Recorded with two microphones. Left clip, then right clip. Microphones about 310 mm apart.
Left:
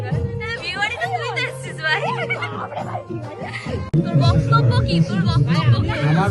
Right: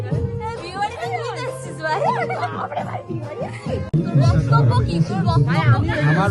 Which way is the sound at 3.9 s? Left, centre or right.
Centre.